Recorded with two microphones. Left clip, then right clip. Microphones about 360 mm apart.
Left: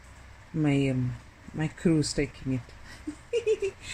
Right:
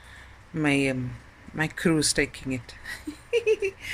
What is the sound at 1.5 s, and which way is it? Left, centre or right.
Speech, right.